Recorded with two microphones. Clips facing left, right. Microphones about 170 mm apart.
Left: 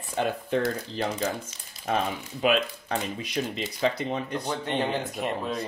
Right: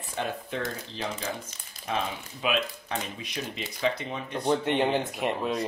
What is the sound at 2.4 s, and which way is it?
Speech, 40° left (ahead or behind).